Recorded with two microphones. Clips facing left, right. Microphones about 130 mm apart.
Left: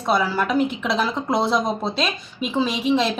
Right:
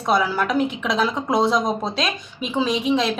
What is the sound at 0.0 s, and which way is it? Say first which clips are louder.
Speech: right 1 dB; centre (ahead or behind).